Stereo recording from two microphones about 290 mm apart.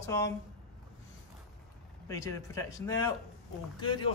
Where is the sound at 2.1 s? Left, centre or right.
Centre.